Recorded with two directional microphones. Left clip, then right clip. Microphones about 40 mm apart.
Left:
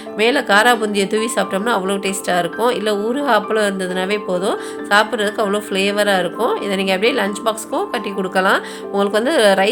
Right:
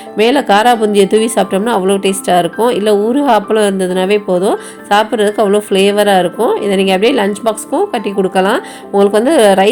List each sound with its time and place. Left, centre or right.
0.2 s speech: right
0.8 s speech: right
1.6 s speech: right
2.0 s speech: right
3.3 s speech: right
5.7 s speech: right
7.7 s a woman's voice: right